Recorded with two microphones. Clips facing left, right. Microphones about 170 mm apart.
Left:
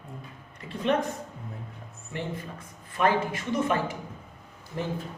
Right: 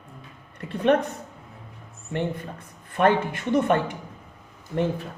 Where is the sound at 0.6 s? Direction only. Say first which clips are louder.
Right 5 dB; 60° right (ahead or behind).